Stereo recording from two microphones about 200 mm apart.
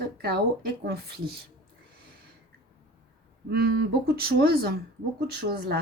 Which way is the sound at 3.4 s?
50° right (ahead or behind).